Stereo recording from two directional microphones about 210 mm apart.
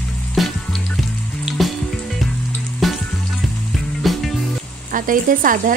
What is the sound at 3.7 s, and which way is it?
Music, centre (ahead or behind).